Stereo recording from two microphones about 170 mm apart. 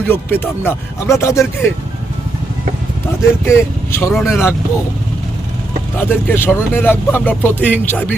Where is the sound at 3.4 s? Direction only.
15° left (ahead or behind).